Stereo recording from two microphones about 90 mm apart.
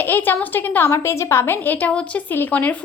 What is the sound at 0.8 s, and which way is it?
A woman's voice, 35° left (ahead or behind).